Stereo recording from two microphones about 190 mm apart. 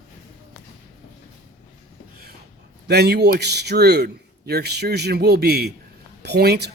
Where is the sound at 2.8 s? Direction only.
60° right (ahead or behind).